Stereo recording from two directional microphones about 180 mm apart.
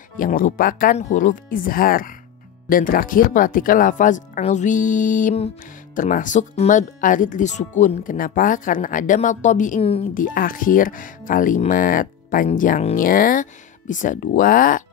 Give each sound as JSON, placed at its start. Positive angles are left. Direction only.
{"t": 0.2, "sound": "speech", "side_deg": 50}
{"t": 9.8, "sound": "a woman's voice", "side_deg": 30}
{"t": 10.1, "sound": "speech", "side_deg": 50}